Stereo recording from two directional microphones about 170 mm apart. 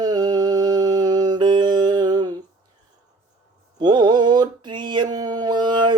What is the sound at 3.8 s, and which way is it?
Mantra, 25° right (ahead or behind).